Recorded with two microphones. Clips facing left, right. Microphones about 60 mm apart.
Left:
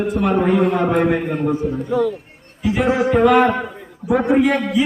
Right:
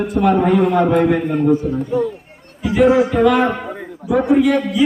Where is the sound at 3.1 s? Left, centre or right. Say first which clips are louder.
Left 1 dB; left.